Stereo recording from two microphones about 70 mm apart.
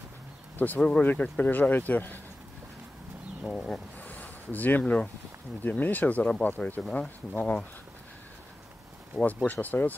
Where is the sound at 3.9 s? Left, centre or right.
Left.